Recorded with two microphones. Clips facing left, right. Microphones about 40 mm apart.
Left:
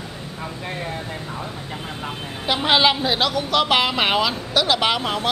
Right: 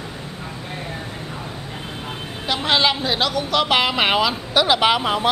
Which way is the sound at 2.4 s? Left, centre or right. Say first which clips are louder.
Left 1 dB; centre.